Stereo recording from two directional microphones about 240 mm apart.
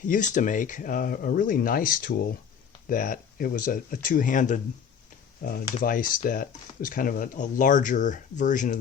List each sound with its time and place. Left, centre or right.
0.0 s speech: left